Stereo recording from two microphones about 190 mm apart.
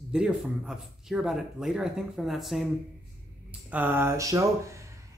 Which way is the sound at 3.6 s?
10° right (ahead or behind).